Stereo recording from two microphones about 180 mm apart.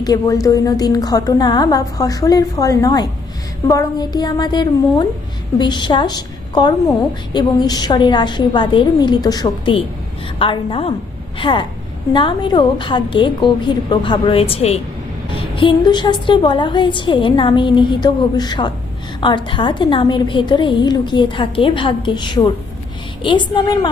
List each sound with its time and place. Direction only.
0.0 s a woman's voice: 20° left (ahead or behind)